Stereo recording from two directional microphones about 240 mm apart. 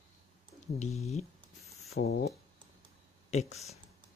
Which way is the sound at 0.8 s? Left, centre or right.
Left.